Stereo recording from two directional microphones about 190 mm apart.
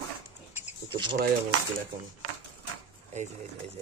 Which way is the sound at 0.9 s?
25° right (ahead or behind).